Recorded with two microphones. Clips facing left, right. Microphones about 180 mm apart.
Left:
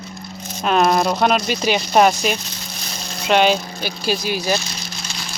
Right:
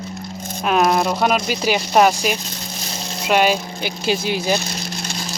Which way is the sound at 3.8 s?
20° right (ahead or behind).